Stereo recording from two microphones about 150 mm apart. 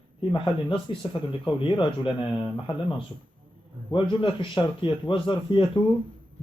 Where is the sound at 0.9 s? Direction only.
35° left (ahead or behind).